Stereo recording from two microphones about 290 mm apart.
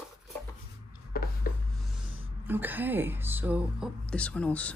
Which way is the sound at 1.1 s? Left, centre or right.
Left.